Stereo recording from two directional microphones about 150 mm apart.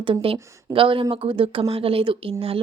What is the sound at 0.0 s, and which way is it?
Speech, 35° right (ahead or behind).